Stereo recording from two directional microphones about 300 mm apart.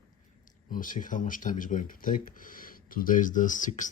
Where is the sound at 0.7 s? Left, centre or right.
Left.